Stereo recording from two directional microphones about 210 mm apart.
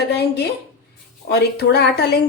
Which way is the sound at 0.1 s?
50° left (ahead or behind).